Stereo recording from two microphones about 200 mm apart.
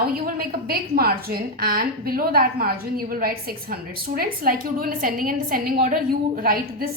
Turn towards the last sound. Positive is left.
turn(degrees=-45)  # may be behind; listen again after turning